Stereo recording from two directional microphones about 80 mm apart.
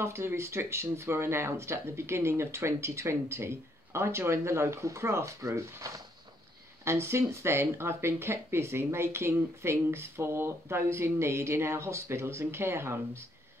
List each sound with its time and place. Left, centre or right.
0.0 s speech: right